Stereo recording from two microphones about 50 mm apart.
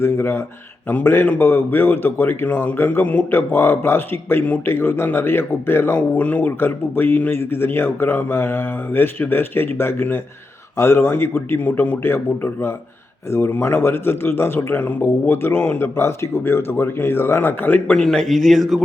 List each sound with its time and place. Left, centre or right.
0.0 s a man's voice: left
3.5 s a man's voice: left
6.0 s speech: left
6.6 s a man's voice: left
17.9 s a man's voice: centre